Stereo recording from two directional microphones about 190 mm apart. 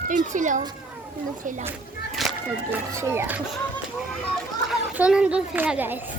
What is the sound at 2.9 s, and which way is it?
Speech, 15° right (ahead or behind).